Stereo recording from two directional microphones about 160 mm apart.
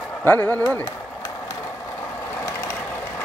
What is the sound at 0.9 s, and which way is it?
Vehicle, 20° left (ahead or behind).